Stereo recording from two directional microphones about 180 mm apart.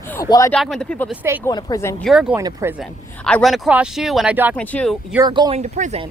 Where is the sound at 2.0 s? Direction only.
5° right (ahead or behind).